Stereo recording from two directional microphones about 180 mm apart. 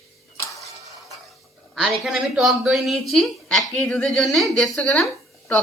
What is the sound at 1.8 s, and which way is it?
Speech, centre (ahead or behind).